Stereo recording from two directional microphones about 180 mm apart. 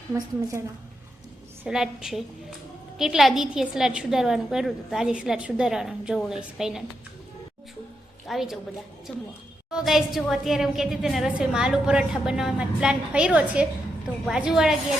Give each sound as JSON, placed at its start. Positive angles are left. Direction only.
{"t": 0.1, "sound": "a woman's voice", "side_deg": -15}
{"t": 1.6, "sound": "a woman's voice", "side_deg": -5}
{"t": 8.3, "sound": "a woman's voice", "side_deg": 0}